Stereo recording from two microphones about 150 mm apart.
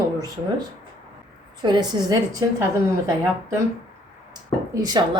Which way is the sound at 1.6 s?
30° right (ahead or behind).